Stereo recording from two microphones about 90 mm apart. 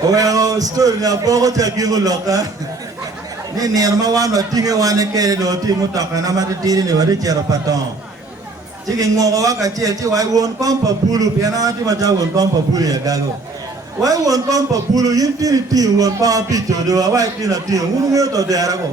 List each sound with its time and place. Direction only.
0.1 s a man's voice: 40° right (ahead or behind)
3.6 s a man's voice: 40° right (ahead or behind)
9.0 s a man's voice: 40° right (ahead or behind)